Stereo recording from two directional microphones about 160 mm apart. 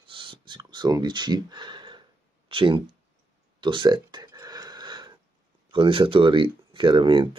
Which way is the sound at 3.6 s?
30° right (ahead or behind).